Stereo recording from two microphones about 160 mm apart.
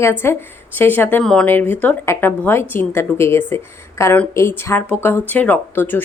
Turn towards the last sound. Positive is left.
turn(degrees=10)  # may be behind; listen again after turning